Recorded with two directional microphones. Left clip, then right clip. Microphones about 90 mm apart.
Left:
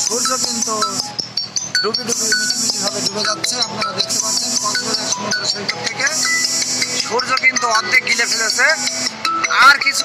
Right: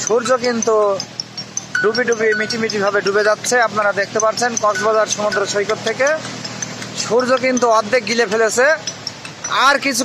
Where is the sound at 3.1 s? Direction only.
20° right (ahead or behind).